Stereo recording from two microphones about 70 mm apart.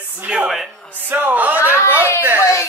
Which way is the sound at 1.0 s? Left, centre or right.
Right.